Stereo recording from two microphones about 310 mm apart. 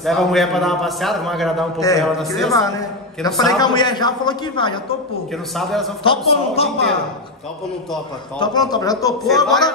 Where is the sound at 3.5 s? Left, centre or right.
Centre.